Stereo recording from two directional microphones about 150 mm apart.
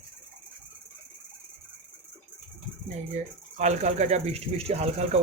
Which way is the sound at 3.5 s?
50° right (ahead or behind).